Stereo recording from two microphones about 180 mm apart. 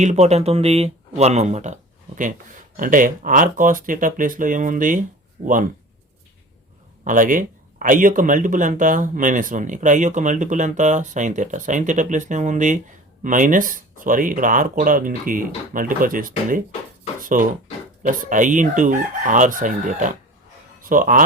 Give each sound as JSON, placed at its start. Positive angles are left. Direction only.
{"t": 0.0, "sound": "speech", "side_deg": -40}
{"t": 7.0, "sound": "speech", "side_deg": -50}